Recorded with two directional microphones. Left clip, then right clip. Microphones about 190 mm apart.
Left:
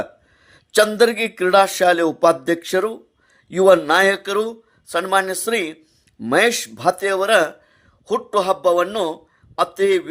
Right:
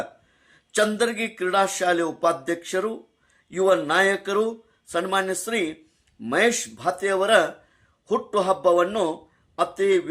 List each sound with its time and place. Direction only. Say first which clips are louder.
0.0 s a man's voice: left 5 dB; 40° left (ahead or behind)